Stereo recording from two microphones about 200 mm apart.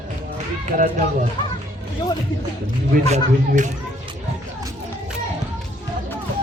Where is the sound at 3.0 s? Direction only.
35° right (ahead or behind).